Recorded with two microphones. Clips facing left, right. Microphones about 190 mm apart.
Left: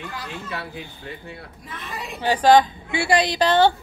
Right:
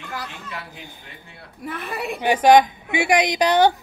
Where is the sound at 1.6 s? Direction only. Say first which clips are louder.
Right 8 dB; 65° right (ahead or behind).